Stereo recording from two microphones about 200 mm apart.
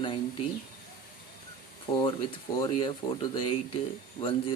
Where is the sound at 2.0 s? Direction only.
25° left (ahead or behind).